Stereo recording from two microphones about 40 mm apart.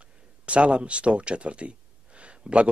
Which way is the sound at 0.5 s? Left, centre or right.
Right.